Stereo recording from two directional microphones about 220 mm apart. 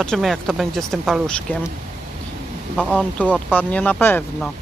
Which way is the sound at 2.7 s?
Centre (ahead or behind).